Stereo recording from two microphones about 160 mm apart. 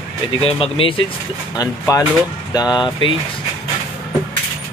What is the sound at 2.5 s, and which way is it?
Speech, 25° left (ahead or behind).